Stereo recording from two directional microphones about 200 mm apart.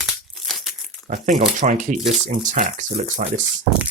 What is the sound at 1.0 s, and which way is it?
Speech, 40° right (ahead or behind).